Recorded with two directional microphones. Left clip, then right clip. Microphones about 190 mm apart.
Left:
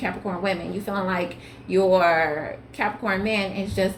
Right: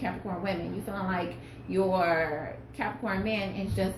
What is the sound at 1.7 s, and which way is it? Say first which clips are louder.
A woman's voice: left 8 dB; 50° left (ahead or behind).